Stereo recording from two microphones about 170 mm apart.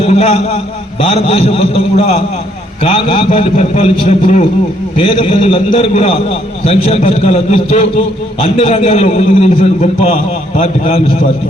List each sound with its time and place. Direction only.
0.0 s a man's voice: 40° left (ahead or behind)
4.9 s a man's voice: 30° left (ahead or behind)